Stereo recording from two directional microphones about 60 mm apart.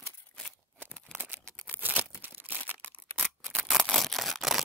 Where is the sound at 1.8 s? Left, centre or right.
Right.